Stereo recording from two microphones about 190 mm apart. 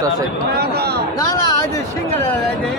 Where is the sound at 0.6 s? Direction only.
55° right (ahead or behind).